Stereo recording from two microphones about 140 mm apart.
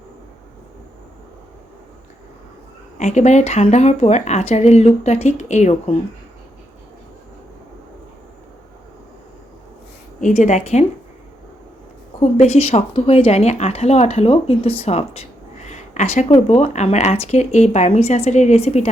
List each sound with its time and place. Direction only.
3.0 s speech: 55° left (ahead or behind)
10.2 s a woman's voice: 60° left (ahead or behind)
12.2 s speech: 50° left (ahead or behind)